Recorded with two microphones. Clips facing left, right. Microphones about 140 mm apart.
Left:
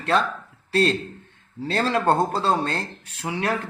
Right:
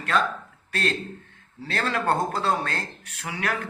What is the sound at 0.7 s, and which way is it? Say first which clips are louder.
A man's voice: left 7 dB; 30° left (ahead or behind).